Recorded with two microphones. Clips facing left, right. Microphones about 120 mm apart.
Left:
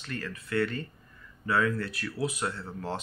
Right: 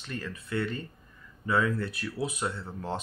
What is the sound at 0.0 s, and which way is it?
Speech, 25° right (ahead or behind).